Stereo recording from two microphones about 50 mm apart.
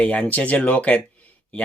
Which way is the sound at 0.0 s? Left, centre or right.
Left.